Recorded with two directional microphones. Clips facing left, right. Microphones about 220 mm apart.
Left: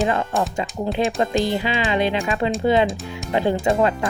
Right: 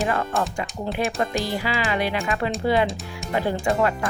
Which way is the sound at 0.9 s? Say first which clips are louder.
Left 4 dB; 25° left (ahead or behind).